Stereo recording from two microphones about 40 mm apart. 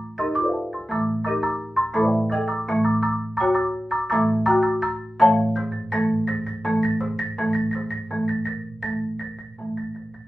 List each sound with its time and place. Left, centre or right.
0.2 s marimba: centre
5.9 s marimba: centre
6.2 s marimba: centre
6.8 s music: centre
7.6 s marimba: centre
8.3 s music: centre